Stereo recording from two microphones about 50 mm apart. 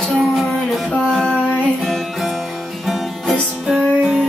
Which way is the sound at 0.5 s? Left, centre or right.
Centre.